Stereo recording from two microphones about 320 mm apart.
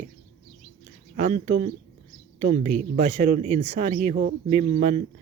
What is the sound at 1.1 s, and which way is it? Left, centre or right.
Speech, right.